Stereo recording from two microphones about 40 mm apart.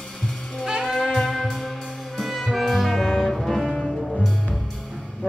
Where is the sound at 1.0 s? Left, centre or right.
Centre.